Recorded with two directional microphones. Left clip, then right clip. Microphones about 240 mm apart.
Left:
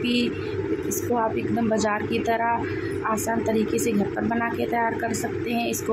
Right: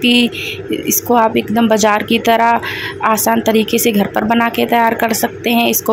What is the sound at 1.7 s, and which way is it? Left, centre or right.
Speech, right.